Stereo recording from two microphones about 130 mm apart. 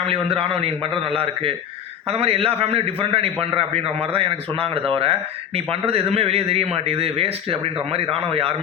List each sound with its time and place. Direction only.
0.0 s a man's voice: 50° right (ahead or behind)